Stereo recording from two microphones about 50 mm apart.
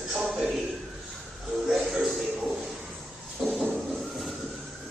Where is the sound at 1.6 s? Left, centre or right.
Centre.